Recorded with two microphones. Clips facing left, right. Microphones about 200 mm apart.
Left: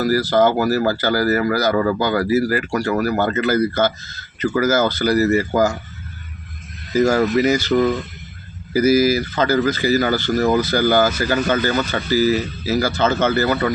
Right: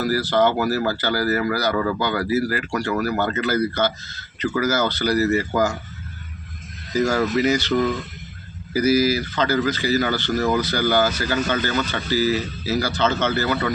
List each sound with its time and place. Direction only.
0.0 s speech: 45° left (ahead or behind)
7.0 s speech: 45° left (ahead or behind)